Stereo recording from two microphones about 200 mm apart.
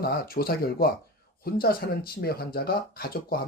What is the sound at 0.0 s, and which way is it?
Speech, 50° left (ahead or behind).